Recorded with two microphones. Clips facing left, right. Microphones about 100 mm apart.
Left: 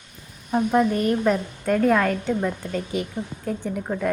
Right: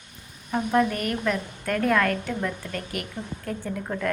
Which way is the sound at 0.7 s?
15° left (ahead or behind).